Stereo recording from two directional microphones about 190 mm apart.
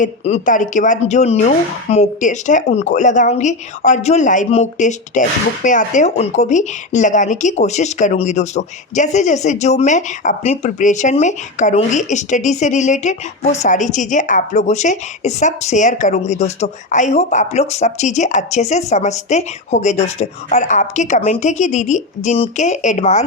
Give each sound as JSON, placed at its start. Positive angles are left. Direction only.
{"t": 0.0, "sound": "speech", "side_deg": 40}